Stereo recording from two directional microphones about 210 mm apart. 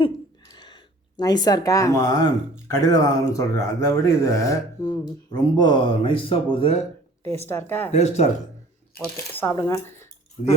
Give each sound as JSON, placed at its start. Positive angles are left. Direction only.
{"t": 0.0, "sound": "a sound", "side_deg": 20}
{"t": 2.8, "sound": "speech", "side_deg": 20}
{"t": 7.3, "sound": "speech", "side_deg": 10}
{"t": 7.9, "sound": "speech", "side_deg": 30}
{"t": 9.3, "sound": "speech", "side_deg": 10}